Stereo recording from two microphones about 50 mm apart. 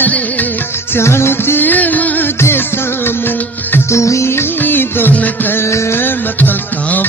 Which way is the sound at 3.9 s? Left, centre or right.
Left.